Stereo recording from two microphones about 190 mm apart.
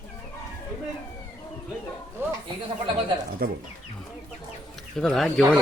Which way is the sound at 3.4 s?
55° right (ahead or behind).